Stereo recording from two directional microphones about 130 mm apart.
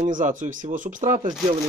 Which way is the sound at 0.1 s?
80° right.